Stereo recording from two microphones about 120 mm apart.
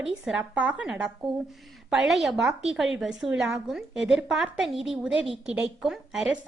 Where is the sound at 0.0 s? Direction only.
5° right (ahead or behind).